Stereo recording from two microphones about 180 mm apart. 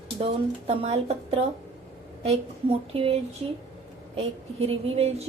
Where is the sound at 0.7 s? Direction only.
35° right (ahead or behind).